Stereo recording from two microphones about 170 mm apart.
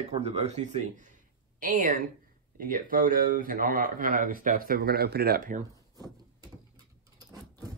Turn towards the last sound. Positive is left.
turn(degrees=-20)  # may be behind; listen again after turning